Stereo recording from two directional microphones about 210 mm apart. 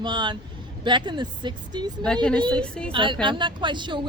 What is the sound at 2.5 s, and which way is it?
Speech, 5° left (ahead or behind).